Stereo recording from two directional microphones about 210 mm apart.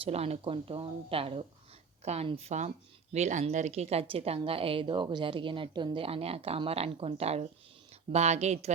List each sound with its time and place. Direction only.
0.0 s a woman's voice: 30° right (ahead or behind)